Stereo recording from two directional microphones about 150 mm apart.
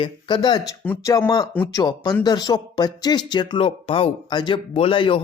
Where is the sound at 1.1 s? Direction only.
25° left (ahead or behind).